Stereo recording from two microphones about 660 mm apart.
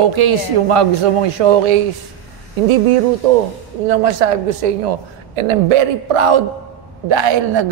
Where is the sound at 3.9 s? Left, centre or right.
Right.